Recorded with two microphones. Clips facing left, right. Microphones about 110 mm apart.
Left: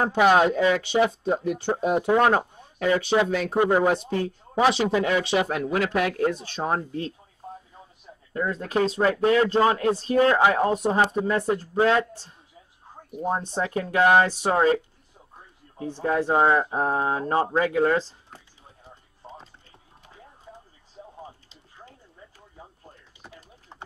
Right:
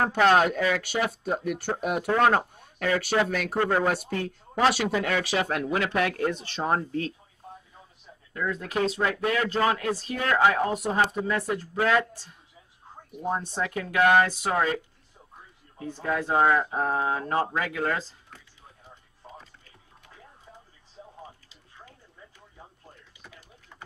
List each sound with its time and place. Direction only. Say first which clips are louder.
0.0 s speech: left 2 dB; 15° left (ahead or behind)
4.7 s speech: left 4 dB; 25° left (ahead or behind)
5.5 s speech: left 2 dB; centre (ahead or behind)
6.8 s speech: right 1 dB; 20° left (ahead or behind)
8.3 s speech: left 3 dB; 30° left (ahead or behind)
13.5 s speech: left 4 dB; 30° left (ahead or behind)
15.8 s speech: left 4 dB; 30° left (ahead or behind)
19.2 s music: left 3 dB; 25° left (ahead or behind)
23.2 s a sound: left 4 dB; 30° left (ahead or behind)